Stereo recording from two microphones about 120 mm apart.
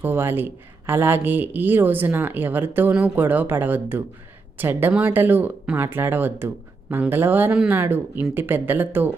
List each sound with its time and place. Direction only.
0.0 s speech: 15° right (ahead or behind)